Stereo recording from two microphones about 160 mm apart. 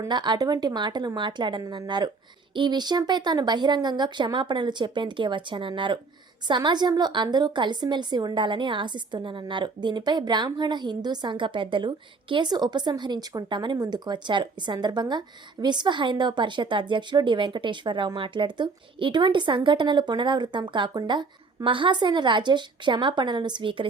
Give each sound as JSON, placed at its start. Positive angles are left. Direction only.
{"t": 0.0, "sound": "a woman's voice", "side_deg": -30}